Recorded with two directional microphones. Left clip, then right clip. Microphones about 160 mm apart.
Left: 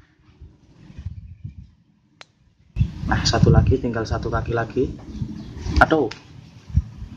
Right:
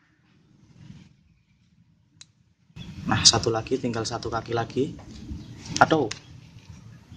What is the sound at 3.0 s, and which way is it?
Speech, 15° right (ahead or behind).